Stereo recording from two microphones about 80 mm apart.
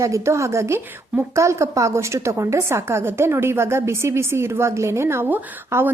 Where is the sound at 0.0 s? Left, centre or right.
Right.